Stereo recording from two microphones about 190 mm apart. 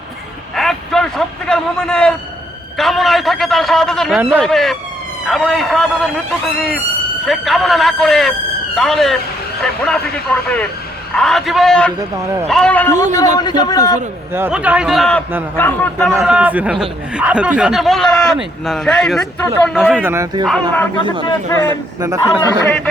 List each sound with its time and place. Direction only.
0.5 s a sound: centre (ahead or behind)
2.7 s speech: centre (ahead or behind)
4.2 s speech: 10° right (ahead or behind)
4.4 s speech: centre (ahead or behind)
7.3 s a man's voice: centre (ahead or behind)
13.4 s a man's voice: 20° left (ahead or behind)
14.3 s a man's voice: 10° right (ahead or behind); by 16.1 s 5° left (ahead or behind)
16.2 s speech: 5° right (ahead or behind)
20.4 s speech: centre (ahead or behind)
21.7 s speech: 15° right (ahead or behind)